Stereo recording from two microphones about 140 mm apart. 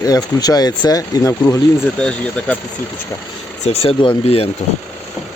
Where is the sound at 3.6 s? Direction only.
50° left (ahead or behind).